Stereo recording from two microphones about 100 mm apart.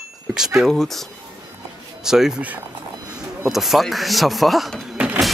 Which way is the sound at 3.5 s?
Centre (ahead or behind).